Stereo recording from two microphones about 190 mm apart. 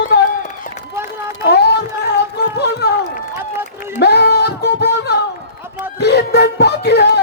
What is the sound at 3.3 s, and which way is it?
Speech, 10° right (ahead or behind).